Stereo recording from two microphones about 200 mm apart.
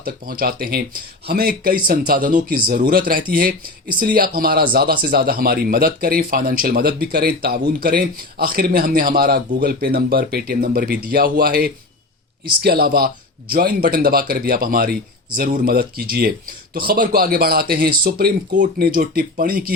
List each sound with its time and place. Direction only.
0.0 s speech: 45° right (ahead or behind)